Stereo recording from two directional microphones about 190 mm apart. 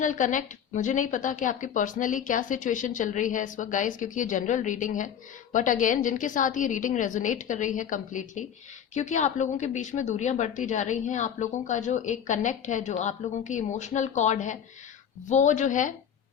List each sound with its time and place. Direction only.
0.0 s a woman's voice: 40° left (ahead or behind)